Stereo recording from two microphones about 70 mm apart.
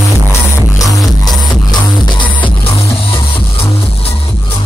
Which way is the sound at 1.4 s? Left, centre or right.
Left.